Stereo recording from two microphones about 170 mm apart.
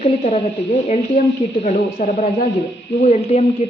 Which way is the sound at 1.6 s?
40° left (ahead or behind).